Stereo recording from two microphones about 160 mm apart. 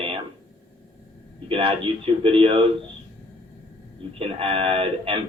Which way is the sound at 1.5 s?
35° right (ahead or behind).